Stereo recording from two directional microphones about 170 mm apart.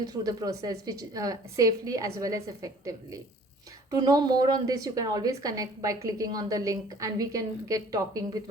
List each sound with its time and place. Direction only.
0.0 s a woman's voice: 20° right (ahead or behind)